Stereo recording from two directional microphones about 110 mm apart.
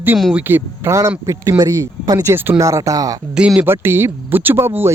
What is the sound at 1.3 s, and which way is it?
Speech, 35° right (ahead or behind).